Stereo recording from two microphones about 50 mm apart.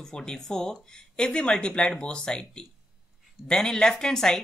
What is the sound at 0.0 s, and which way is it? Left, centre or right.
Speech, centre.